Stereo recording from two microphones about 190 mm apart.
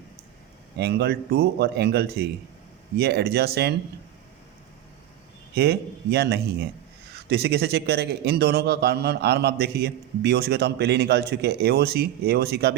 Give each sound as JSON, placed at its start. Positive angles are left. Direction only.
{"t": 0.8, "sound": "a man's voice", "side_deg": -60}
{"t": 5.5, "sound": "a man's voice", "side_deg": -60}